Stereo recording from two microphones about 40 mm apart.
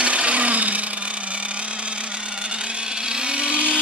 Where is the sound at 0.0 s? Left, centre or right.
Right.